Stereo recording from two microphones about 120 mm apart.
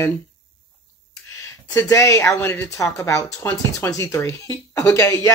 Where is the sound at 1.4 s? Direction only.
25° left (ahead or behind).